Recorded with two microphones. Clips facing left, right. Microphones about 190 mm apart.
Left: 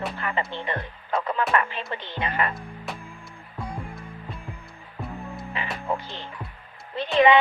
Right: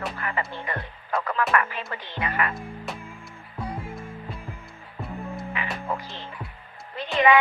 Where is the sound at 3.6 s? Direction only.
5° right (ahead or behind).